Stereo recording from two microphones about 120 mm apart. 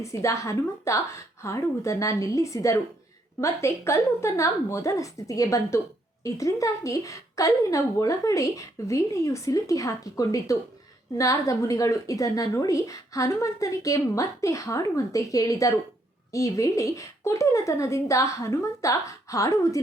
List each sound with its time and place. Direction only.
0.0 s a woman's voice: 25° left (ahead or behind)